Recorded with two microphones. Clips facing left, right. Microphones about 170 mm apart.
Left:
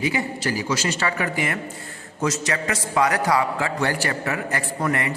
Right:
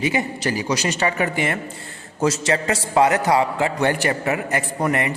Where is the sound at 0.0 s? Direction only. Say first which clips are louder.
Right 2 dB; 20° right (ahead or behind).